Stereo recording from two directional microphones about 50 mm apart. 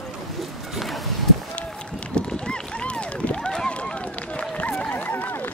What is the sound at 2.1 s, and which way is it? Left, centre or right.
Run, centre.